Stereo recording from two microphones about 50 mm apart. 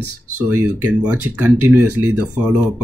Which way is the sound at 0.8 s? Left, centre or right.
Right.